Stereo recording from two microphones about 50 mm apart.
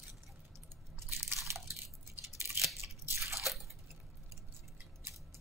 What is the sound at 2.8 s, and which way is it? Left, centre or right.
Crunch, right.